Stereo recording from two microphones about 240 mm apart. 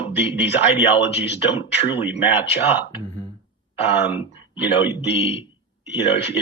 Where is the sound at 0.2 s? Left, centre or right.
Left.